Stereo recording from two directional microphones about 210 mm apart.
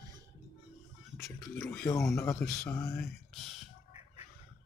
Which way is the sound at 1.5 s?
10° left (ahead or behind).